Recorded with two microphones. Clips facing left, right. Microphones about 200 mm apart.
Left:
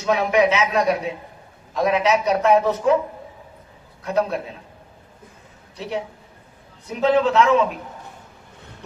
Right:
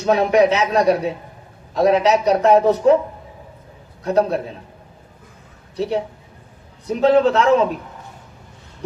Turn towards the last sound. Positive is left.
turn(degrees=-35)  # may be behind; listen again after turning